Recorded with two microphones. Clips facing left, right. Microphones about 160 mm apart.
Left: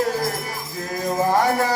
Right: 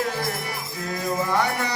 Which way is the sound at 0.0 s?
40° left (ahead or behind).